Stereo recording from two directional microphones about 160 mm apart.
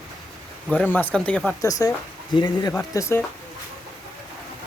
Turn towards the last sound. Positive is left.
turn(degrees=20)  # may be behind; listen again after turning